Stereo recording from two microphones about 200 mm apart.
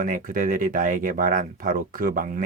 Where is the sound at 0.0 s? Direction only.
45° right (ahead or behind).